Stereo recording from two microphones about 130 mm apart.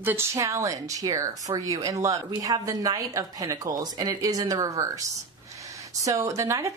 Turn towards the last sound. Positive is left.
turn(degrees=-25)  # may be behind; listen again after turning